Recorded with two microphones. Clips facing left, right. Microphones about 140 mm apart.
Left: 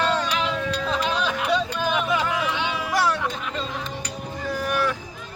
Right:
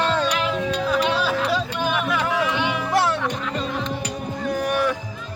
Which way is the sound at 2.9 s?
25° right (ahead or behind).